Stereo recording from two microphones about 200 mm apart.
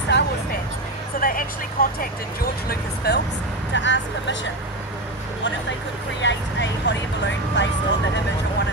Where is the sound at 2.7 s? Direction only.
55° left (ahead or behind).